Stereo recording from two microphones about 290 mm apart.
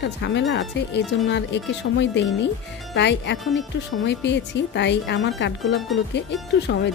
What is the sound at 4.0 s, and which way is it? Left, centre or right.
Speech, left.